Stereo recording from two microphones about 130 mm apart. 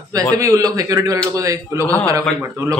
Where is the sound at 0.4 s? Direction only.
25° right (ahead or behind).